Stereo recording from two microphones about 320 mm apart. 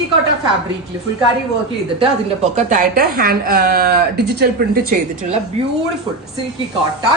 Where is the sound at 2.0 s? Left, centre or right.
Right.